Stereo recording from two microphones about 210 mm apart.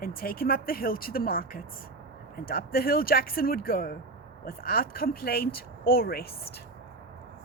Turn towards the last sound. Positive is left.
turn(degrees=45)  # may be behind; listen again after turning